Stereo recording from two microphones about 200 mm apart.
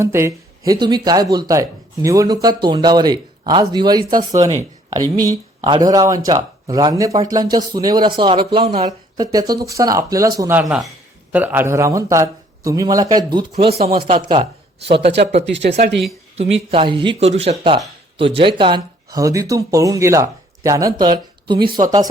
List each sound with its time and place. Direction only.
0.0 s speech: 15° right (ahead or behind); by 9.2 s 30° right (ahead or behind)
9.2 s speech: 20° right (ahead or behind)
10.6 s a man's voice: centre (ahead or behind); by 14.4 s 25° right (ahead or behind)
15.4 s speech: 60° right (ahead or behind)
16.4 s speech: 30° right (ahead or behind)